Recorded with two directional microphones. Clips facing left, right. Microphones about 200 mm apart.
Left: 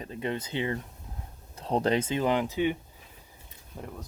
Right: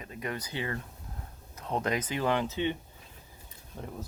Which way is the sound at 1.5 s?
30° left (ahead or behind).